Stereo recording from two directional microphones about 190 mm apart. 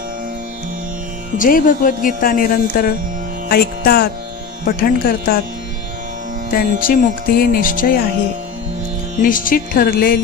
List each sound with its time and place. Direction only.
1.4 s speech: 45° left (ahead or behind)
6.5 s speech: 50° left (ahead or behind)
9.2 s speech: 45° left (ahead or behind)